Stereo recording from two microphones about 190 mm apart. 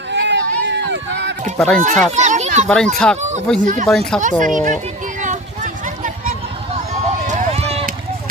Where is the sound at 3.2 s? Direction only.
40° right (ahead or behind).